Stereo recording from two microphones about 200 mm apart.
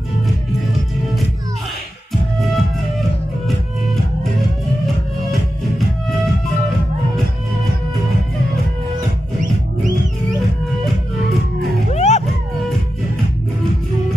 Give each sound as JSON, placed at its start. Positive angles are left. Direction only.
{"t": 2.4, "sound": "music", "side_deg": 0}
{"t": 11.9, "sound": "music", "side_deg": 35}